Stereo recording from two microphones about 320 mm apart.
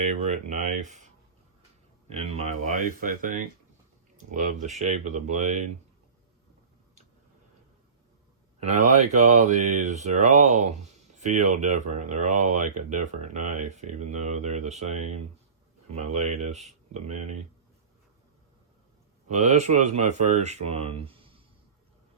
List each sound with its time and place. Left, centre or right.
0.0 s speech: right
9.2 s speech: right
19.3 s speech: right